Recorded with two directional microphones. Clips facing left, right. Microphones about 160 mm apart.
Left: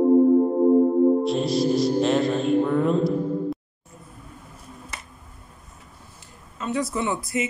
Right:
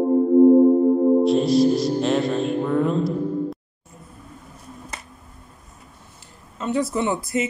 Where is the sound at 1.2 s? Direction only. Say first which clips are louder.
Right 5 dB; centre (ahead or behind).